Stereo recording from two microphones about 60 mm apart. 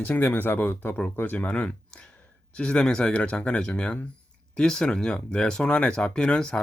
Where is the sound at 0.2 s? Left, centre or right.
Left.